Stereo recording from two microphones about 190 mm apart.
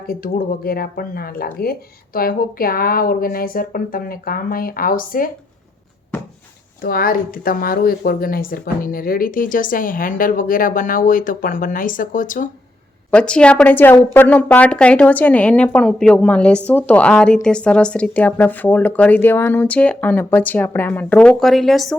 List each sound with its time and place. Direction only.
0.1 s speech: 50° left (ahead or behind)
6.8 s speech: 50° left (ahead or behind)
13.1 s speech: 5° left (ahead or behind)